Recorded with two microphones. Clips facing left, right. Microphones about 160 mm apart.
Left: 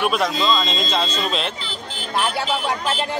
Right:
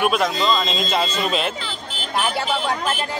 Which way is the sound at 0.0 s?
Centre (ahead or behind).